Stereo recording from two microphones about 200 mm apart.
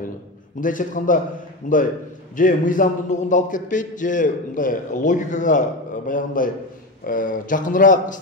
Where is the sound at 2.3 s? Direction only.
40° left (ahead or behind).